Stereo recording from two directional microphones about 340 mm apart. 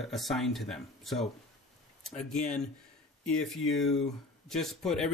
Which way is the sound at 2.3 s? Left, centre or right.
Left.